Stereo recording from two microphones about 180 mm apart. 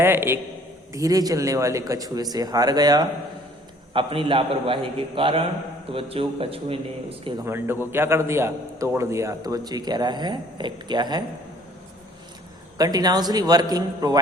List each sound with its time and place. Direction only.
0.0 s a man's voice: 10° right (ahead or behind); by 6.7 s 30° right (ahead or behind)
7.4 s a man's voice: 15° right (ahead or behind)
12.7 s a man's voice: 20° right (ahead or behind)